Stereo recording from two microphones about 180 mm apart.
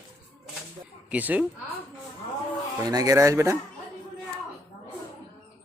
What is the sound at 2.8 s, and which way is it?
Speech, 20° right (ahead or behind).